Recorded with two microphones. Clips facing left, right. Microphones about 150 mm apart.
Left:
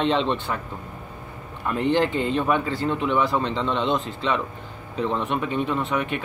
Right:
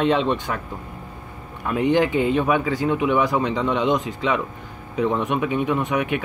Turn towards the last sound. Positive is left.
turn(degrees=-10)  # may be behind; listen again after turning